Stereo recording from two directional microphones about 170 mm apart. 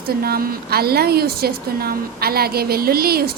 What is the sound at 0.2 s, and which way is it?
A woman's voice, 60° right (ahead or behind).